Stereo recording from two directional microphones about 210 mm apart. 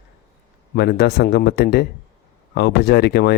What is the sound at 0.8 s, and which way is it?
Speech, 50° left (ahead or behind).